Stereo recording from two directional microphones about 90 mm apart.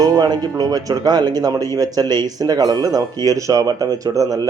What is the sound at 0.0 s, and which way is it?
Speech, 45° right (ahead or behind).